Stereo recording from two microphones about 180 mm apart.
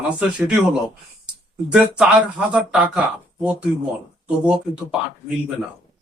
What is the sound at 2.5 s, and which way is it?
Speech, 5° right (ahead or behind).